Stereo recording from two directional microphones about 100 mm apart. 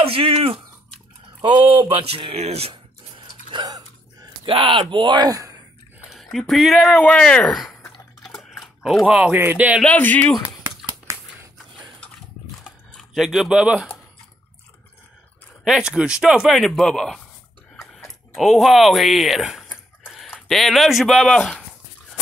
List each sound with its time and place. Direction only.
0.0 s speech: 70° right (ahead or behind)
1.9 s a sound: 70° right (ahead or behind)
4.5 s speech: 60° right (ahead or behind); by 5.6 s 35° right (ahead or behind)
6.1 s speech: centre (ahead or behind)
8.2 s typing: centre (ahead or behind); by 9.8 s 20° right (ahead or behind)
9.8 s speech: 15° left (ahead or behind)
11.1 s a sound: 30° right (ahead or behind)
12.9 s speech: centre (ahead or behind)
15.6 s speech: 5° right (ahead or behind)
18.3 s speech: centre (ahead or behind)
20.0 s a sound: 5° right (ahead or behind)
20.3 s speech: 5° left (ahead or behind)